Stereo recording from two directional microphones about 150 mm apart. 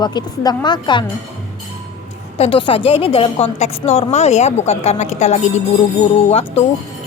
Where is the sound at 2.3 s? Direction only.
40° left (ahead or behind).